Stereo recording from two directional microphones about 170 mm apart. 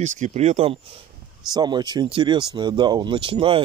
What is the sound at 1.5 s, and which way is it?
Speech, 25° right (ahead or behind).